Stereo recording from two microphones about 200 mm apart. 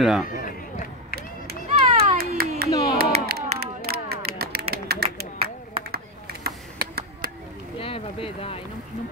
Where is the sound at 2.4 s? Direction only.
50° right (ahead or behind).